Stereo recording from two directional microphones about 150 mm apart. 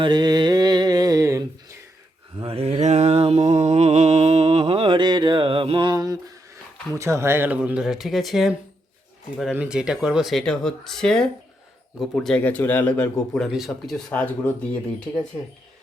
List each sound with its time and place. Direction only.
0.0 s mantra: 30° right (ahead or behind)
2.4 s mantra: 40° right (ahead or behind); by 6.4 s 25° right (ahead or behind)
6.9 s speech: 20° right (ahead or behind); by 14.0 s centre (ahead or behind)
14.1 s speech: 10° left (ahead or behind)